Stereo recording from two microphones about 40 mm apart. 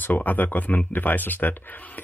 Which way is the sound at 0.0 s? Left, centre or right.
Left.